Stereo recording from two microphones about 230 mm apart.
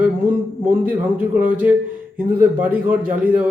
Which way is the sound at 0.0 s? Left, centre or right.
Centre.